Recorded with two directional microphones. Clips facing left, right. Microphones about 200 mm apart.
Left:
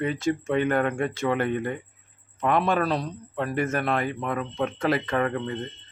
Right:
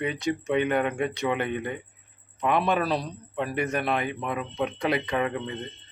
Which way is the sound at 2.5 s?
5° right (ahead or behind).